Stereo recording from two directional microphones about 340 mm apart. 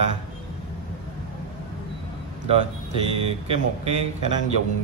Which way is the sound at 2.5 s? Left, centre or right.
Centre.